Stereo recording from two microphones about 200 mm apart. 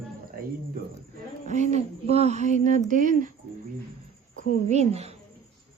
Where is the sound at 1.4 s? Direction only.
35° right (ahead or behind).